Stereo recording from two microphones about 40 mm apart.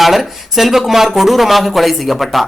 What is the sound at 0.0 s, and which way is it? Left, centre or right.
A man's voice, centre.